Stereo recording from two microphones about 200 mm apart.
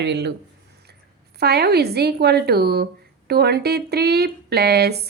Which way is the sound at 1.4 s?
55° right (ahead or behind).